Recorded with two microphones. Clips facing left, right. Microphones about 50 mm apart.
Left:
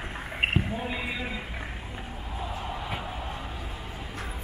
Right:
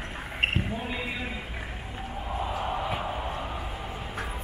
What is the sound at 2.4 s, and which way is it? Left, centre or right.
Music, right.